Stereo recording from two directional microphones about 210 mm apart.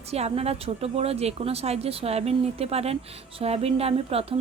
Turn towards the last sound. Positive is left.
turn(degrees=-30)  # may be behind; listen again after turning